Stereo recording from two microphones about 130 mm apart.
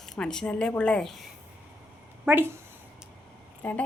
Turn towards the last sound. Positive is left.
turn(degrees=15)  # may be behind; listen again after turning